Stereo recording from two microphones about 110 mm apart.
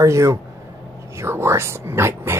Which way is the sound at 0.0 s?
25° right (ahead or behind).